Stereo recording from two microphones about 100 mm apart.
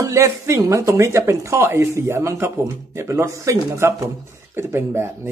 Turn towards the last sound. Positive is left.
turn(degrees=-25)  # may be behind; listen again after turning